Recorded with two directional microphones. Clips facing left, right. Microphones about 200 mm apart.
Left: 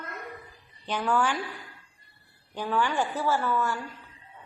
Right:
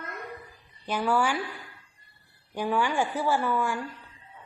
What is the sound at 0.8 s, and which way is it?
Speech, 10° right (ahead or behind).